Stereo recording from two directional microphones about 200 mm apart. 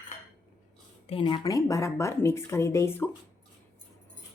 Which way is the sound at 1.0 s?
25° left (ahead or behind).